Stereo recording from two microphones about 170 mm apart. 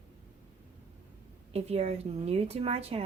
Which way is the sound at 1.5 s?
40° right (ahead or behind).